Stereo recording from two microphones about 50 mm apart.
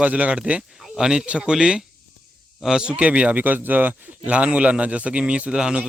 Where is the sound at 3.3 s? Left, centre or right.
Right; by 5.8 s centre.